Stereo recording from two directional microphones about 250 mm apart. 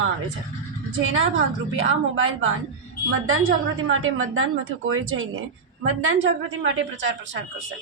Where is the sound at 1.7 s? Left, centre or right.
Right.